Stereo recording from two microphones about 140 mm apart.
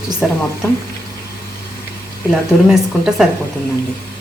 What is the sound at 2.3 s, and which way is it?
Speech, 5° right (ahead or behind).